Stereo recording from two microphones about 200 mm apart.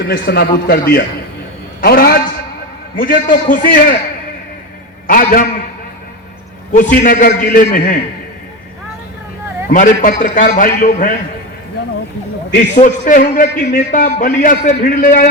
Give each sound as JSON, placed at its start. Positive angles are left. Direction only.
{"t": 0.1, "sound": "a man's voice", "side_deg": 50}
{"t": 5.0, "sound": "a man's voice", "side_deg": 45}
{"t": 6.7, "sound": "a man's voice", "side_deg": 40}
{"t": 9.7, "sound": "a man's voice", "side_deg": 40}
{"t": 12.5, "sound": "a man's voice", "side_deg": 40}